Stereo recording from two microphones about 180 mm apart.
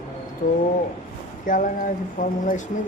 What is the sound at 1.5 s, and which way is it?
Speech, 50° left (ahead or behind).